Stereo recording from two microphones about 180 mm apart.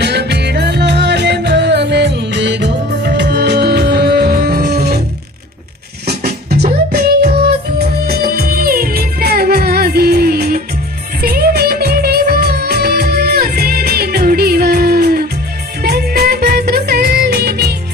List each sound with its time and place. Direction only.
0.0 s music: 65° right (ahead or behind)
6.1 s music: 60° right (ahead or behind)
11.2 s music of bollywood: 60° right (ahead or behind)
15.8 s music: 60° right (ahead or behind)
16.6 s music of bollywood: 60° right (ahead or behind)